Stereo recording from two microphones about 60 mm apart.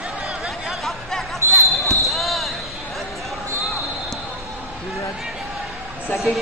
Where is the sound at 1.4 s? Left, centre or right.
Right.